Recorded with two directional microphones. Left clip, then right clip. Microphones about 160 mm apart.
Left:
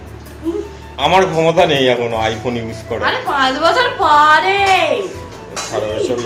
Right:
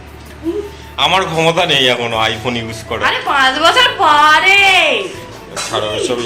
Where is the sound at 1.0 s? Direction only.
20° left (ahead or behind).